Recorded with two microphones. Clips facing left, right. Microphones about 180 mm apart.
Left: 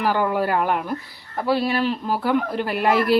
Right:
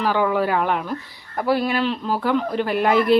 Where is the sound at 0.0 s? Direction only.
5° left (ahead or behind).